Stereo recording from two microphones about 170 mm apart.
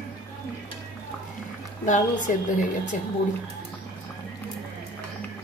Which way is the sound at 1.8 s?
45° left (ahead or behind).